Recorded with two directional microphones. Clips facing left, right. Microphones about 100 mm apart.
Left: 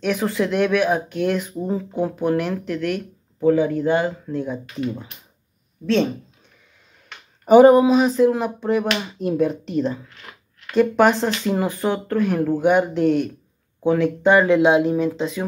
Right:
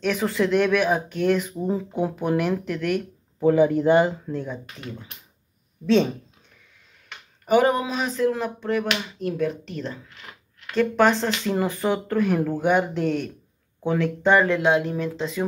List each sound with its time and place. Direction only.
0.0 s speech: 5° left (ahead or behind); by 4.1 s 15° right (ahead or behind)
4.3 s speech: 5° left (ahead or behind)
5.9 s speech: 5° right (ahead or behind)
7.4 s speech: 20° left (ahead or behind); by 15.4 s 5° left (ahead or behind)